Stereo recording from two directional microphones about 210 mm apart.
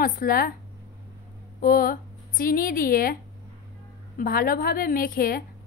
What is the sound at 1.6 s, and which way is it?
A woman's voice, 40° left (ahead or behind).